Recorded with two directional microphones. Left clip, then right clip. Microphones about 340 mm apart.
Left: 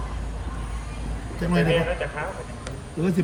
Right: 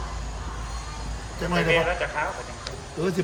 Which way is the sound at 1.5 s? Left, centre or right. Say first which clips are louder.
Even; centre.